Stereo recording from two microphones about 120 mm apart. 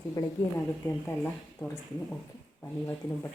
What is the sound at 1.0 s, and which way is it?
Speech, 20° left (ahead or behind).